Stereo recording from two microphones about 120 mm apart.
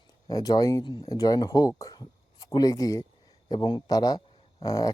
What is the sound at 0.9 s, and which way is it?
Speech, 40° left (ahead or behind).